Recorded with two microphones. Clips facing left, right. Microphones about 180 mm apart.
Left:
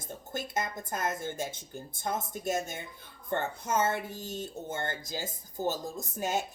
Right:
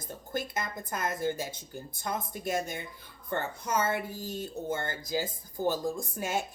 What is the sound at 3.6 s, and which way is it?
Speech, 25° left (ahead or behind).